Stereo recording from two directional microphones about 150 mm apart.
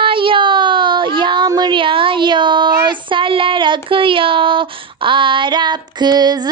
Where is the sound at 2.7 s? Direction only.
30° right (ahead or behind).